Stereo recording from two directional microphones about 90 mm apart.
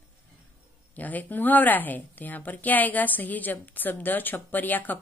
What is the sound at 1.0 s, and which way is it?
A woman's voice, 20° left (ahead or behind).